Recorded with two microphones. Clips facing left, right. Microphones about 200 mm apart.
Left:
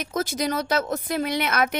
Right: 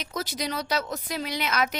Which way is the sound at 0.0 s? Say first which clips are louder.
Left 6 dB; 50° left (ahead or behind).